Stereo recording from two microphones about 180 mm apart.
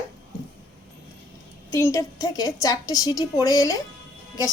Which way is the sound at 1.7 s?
15° left (ahead or behind).